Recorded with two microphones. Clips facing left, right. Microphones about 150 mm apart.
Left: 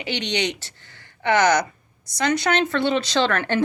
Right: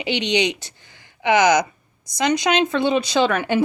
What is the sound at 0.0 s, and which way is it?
A woman's voice, 15° right (ahead or behind).